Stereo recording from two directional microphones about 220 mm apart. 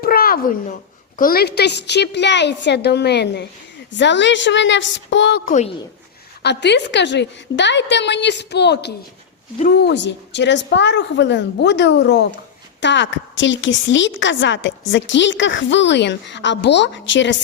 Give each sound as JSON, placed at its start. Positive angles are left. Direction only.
{"t": 0.0, "sound": "a sound", "side_deg": 40}
{"t": 1.2, "sound": "a woman's voice", "side_deg": 45}
{"t": 5.5, "sound": "a woman's voice", "side_deg": 30}
{"t": 6.4, "sound": "a woman's voice", "side_deg": 50}